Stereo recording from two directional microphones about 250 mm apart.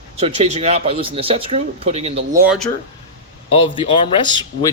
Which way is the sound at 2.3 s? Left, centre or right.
Centre.